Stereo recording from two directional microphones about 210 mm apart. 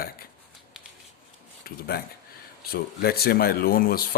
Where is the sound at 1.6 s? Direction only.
45° left (ahead or behind).